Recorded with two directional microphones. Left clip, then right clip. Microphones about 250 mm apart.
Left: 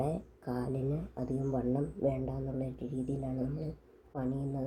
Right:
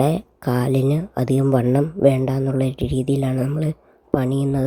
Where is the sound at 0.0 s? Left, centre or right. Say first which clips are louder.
Right 15 dB; right.